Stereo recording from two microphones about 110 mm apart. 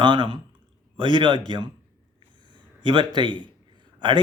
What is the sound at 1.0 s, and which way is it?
Speech, 45° right (ahead or behind).